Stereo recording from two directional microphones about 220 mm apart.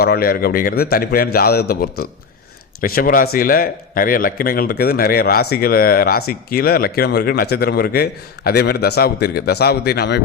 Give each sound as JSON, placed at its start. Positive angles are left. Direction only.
{"t": 0.0, "sound": "speech", "side_deg": 45}